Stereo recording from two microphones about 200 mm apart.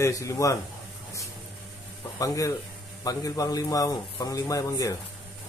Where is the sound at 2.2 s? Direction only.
15° left (ahead or behind).